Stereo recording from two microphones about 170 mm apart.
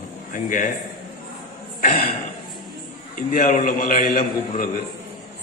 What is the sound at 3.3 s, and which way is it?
A man's voice, 45° left (ahead or behind).